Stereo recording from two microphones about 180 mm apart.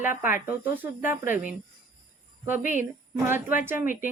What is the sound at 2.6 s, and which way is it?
Speech, 45° left (ahead or behind).